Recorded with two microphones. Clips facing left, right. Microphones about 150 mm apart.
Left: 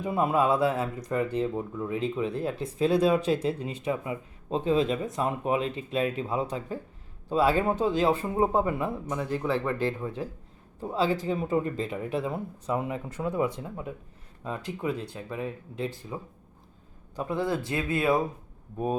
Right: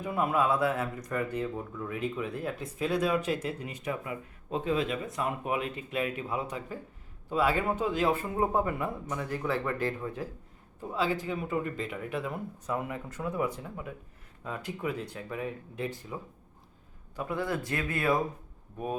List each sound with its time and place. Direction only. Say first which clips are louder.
0.0 s a man's voice: left 3 dB; 25° left (ahead or behind)
15.1 s speech: left 2 dB; 25° left (ahead or behind)
17.2 s speech: left 3 dB; 30° left (ahead or behind)